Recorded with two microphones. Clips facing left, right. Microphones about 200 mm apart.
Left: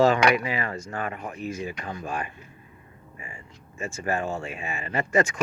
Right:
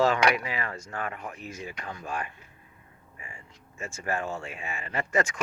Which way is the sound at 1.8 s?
20° left (ahead or behind).